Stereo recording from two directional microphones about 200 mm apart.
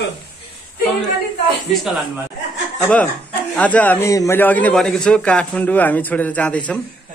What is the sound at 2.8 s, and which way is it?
A man's voice, 5° left (ahead or behind).